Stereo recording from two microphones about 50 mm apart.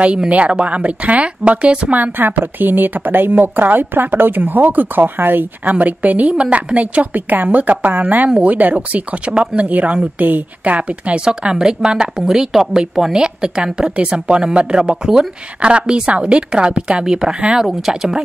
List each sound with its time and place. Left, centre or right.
0.3 s a woman's voice: right
2.0 s a woman's voice: right; by 18.2 s centre